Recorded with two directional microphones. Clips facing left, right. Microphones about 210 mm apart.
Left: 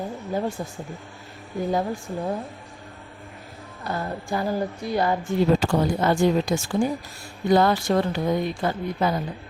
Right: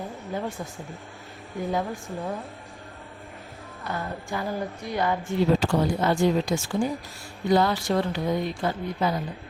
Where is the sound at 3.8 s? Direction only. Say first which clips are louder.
Left 3 dB; 35° left (ahead or behind).